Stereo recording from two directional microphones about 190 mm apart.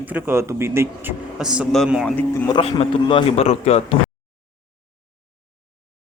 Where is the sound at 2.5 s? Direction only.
30° left (ahead or behind).